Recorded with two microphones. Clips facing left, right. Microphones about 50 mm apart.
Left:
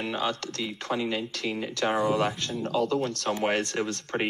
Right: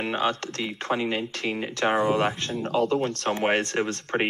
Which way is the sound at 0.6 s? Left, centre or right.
Right.